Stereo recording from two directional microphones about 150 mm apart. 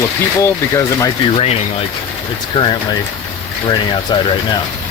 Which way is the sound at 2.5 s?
30° left (ahead or behind).